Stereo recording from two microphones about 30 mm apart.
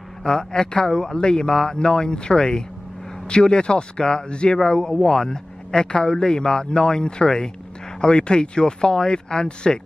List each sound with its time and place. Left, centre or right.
0.2 s a man's voice: left